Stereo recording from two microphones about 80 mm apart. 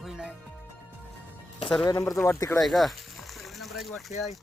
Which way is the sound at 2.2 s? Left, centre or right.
Left.